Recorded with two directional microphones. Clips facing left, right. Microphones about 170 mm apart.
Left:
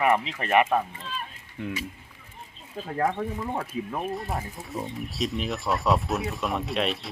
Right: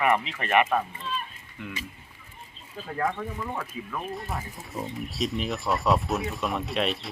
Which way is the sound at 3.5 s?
35° left (ahead or behind).